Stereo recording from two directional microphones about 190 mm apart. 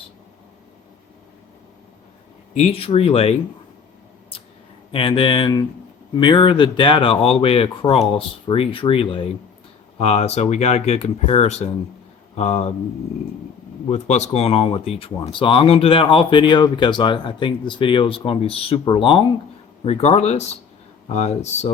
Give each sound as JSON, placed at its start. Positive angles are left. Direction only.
{"t": 2.6, "sound": "speech", "side_deg": 30}
{"t": 4.9, "sound": "speech", "side_deg": 25}
{"t": 13.9, "sound": "speech", "side_deg": 35}